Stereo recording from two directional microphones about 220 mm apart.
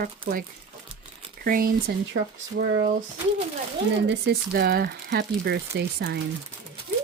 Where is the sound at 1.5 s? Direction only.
40° right (ahead or behind).